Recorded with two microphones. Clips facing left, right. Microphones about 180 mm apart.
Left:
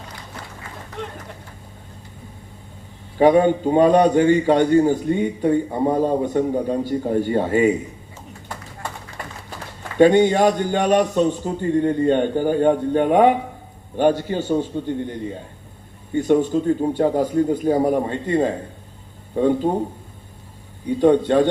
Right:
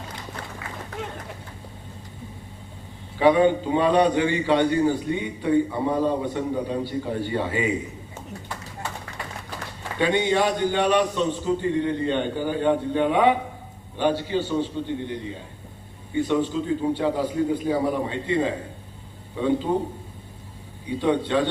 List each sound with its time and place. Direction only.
3.2 s a man's voice: 45° left (ahead or behind)
10.0 s a man's voice: 45° left (ahead or behind)
20.8 s a man's voice: 50° left (ahead or behind)